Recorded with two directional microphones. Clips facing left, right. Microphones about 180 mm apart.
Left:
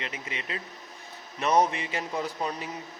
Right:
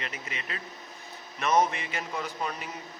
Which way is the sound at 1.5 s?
35° left (ahead or behind).